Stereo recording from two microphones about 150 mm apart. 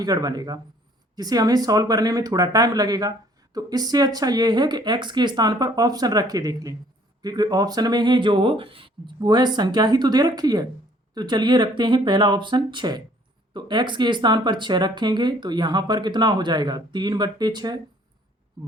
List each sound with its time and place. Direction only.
0.0 s speech: 25° right (ahead or behind)